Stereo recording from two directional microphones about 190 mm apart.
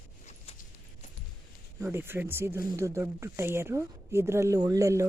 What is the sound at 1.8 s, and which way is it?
Speech, 10° right (ahead or behind).